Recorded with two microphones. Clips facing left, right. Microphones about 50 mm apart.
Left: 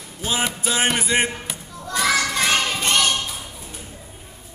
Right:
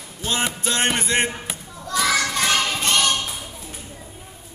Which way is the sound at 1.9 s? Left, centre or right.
Left.